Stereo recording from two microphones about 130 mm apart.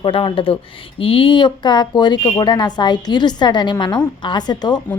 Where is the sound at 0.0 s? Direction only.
40° left (ahead or behind).